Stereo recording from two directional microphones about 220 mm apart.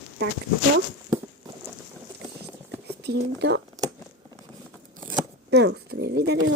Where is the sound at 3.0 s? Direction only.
50° right (ahead or behind).